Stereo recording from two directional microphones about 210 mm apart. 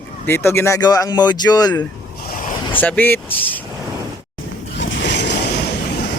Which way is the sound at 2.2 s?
40° left (ahead or behind).